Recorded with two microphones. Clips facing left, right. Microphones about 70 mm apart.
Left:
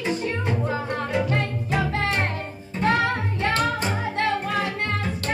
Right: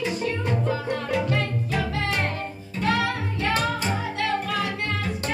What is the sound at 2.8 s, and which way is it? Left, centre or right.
Music, left.